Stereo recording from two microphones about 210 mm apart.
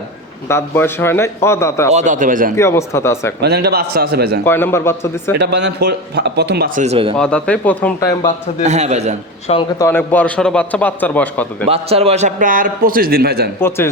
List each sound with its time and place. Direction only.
0.4 s a man's voice: 10° left (ahead or behind)
1.9 s a man's voice: 35° right (ahead or behind)
2.6 s a man's voice: 15° left (ahead or behind)
3.4 s speech: 50° right (ahead or behind)
4.4 s a man's voice: 10° left (ahead or behind)
5.4 s speech: 55° right (ahead or behind)
6.8 s speech: 30° right (ahead or behind)
7.2 s a man's voice: 5° left (ahead or behind)
8.6 s a man's voice: 30° right (ahead or behind)
9.5 s a man's voice: 20° left (ahead or behind)
11.7 s a man's voice: 30° right (ahead or behind); by 13.5 s 45° right (ahead or behind)
13.6 s a man's voice: 10° left (ahead or behind)